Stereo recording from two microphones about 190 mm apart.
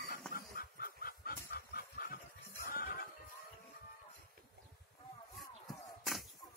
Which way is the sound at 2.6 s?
50° left (ahead or behind).